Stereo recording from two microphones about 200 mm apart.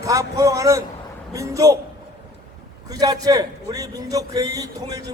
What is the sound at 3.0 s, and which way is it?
A man's voice, 20° right (ahead or behind).